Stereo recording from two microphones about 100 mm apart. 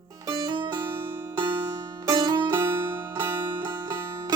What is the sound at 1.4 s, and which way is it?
Music, 45° right (ahead or behind).